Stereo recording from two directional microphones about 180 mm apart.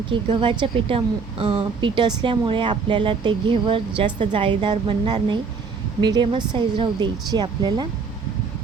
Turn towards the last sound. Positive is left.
turn(degrees=-25)  # may be behind; listen again after turning